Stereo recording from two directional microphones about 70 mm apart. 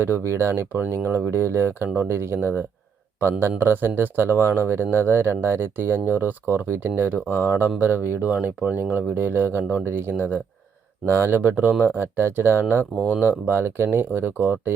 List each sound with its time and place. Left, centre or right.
0.0 s speech: right
11.9 s speech: right